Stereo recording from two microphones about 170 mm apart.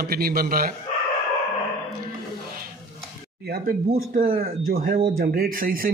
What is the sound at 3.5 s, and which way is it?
Speech, 55° right (ahead or behind).